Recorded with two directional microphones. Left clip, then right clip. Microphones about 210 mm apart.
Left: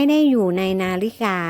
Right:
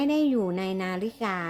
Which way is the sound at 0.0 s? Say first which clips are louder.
Left 8 dB; 35° left (ahead or behind).